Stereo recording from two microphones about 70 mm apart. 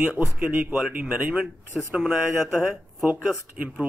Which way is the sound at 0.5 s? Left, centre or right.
Right.